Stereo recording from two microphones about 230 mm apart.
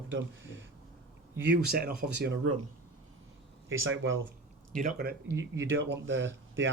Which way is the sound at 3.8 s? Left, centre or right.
Right.